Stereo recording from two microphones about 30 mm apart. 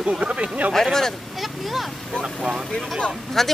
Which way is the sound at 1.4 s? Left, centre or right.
Centre.